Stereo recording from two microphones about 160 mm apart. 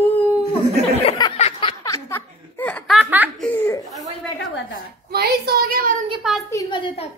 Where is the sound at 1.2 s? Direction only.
25° left (ahead or behind); by 2.9 s 10° left (ahead or behind).